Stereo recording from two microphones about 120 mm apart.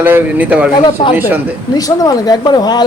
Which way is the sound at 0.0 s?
15° right (ahead or behind).